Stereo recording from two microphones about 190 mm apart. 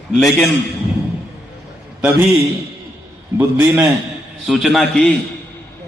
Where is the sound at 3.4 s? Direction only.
5° right (ahead or behind).